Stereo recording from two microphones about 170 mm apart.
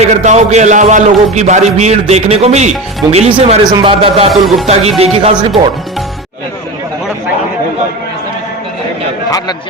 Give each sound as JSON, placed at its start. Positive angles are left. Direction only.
{"t": 0.0, "sound": "a man's voice", "side_deg": -40}
{"t": 4.3, "sound": "speech", "side_deg": 0}
{"t": 4.6, "sound": "a man's voice", "side_deg": -40}